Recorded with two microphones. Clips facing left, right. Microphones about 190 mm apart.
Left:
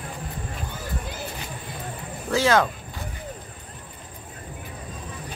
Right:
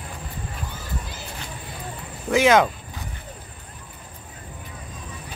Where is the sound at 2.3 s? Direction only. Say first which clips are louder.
Right 3 dB; 15° right (ahead or behind).